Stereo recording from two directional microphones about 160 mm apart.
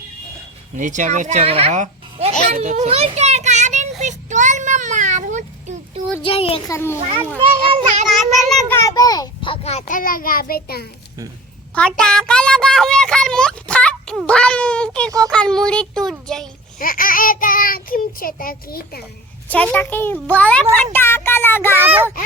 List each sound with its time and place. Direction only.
0.8 s speech: 50° right (ahead or behind)
2.5 s child singing: 45° right (ahead or behind)
6.2 s a child's voice: 35° left (ahead or behind)
6.7 s a child's voice: 15° left (ahead or behind)
7.3 s a child's voice: 40° right (ahead or behind)
8.7 s a child's voice: 20° left (ahead or behind); by 10.8 s 70° left (ahead or behind)
11.7 s a child's voice: 5° left (ahead or behind)
16.8 s child singing: 60° left (ahead or behind)
19.5 s a child's voice: 10° left (ahead or behind)
21.8 s a child's voice: 15° right (ahead or behind)